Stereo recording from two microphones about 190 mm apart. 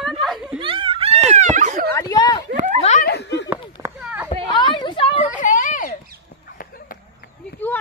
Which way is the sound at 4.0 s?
5° right (ahead or behind).